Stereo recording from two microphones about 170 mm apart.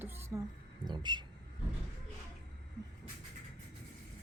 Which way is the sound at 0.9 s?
25° right (ahead or behind).